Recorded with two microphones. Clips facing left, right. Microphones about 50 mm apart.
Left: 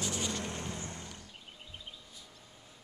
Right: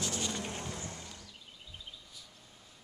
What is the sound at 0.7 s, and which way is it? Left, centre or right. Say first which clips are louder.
Vehicle: left 1 dB; left.